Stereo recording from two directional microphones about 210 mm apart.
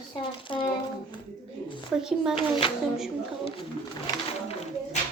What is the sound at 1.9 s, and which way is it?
Speech, 5° right (ahead or behind).